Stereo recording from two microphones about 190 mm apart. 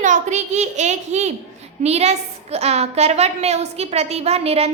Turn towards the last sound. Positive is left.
turn(degrees=-30)  # may be behind; listen again after turning